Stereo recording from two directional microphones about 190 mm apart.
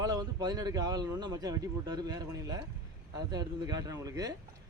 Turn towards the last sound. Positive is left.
turn(degrees=-20)  # may be behind; listen again after turning